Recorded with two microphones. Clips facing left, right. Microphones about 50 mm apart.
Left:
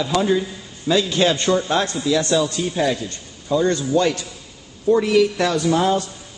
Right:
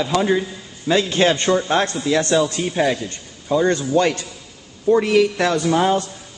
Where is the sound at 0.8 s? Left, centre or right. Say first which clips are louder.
Right 1 dB; right.